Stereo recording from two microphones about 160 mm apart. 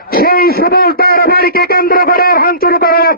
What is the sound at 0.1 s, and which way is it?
A man's voice, 70° left (ahead or behind).